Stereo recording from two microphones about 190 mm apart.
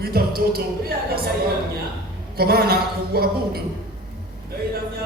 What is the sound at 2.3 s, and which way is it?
A woman's voice, 55° right (ahead or behind).